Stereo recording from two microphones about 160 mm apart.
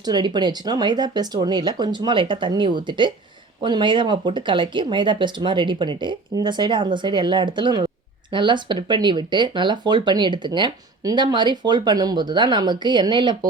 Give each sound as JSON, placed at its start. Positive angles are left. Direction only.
{"t": 0.0, "sound": "speech", "side_deg": -25}